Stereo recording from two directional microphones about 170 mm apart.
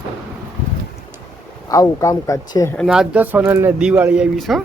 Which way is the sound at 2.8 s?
5° right (ahead or behind).